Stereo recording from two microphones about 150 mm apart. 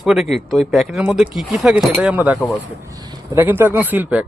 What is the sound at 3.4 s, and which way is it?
Speech, 15° right (ahead or behind).